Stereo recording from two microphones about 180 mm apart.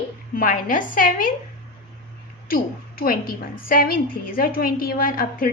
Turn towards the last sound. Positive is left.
turn(degrees=50)  # may be behind; listen again after turning